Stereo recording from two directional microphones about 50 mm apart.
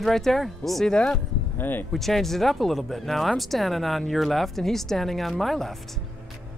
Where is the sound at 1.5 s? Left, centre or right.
Left.